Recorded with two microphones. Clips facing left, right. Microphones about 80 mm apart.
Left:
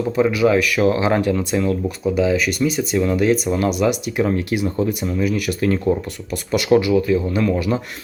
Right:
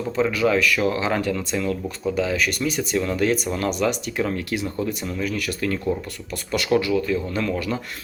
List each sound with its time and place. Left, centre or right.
0.2 s speech: centre
2.0 s speech: centre
4.2 s speech: left